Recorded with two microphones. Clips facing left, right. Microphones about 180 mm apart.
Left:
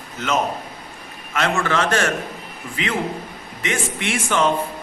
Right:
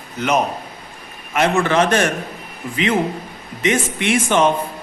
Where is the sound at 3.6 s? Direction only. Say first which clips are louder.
Right 6 dB; 20° right (ahead or behind).